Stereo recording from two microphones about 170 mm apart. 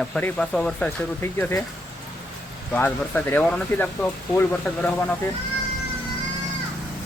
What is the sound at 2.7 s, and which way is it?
Speech, 10° left (ahead or behind).